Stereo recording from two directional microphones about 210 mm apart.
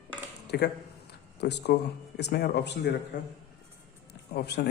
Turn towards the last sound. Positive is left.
turn(degrees=50)  # may be behind; listen again after turning